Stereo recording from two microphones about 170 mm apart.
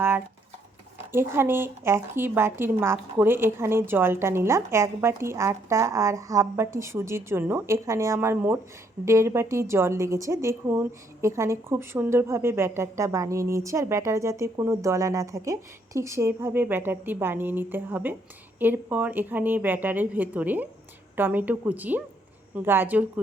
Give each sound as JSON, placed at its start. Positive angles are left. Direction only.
{"t": 1.1, "sound": "a woman's voice", "side_deg": -15}